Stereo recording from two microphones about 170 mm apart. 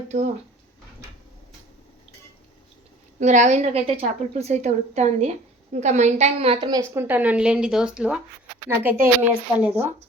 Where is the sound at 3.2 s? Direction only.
45° right (ahead or behind).